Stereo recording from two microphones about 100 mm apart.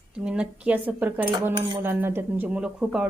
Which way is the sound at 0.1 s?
10° right (ahead or behind).